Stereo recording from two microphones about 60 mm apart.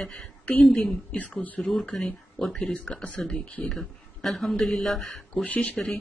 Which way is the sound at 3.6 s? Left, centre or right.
Centre.